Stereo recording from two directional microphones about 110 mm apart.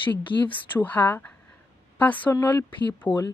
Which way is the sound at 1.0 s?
15° left (ahead or behind).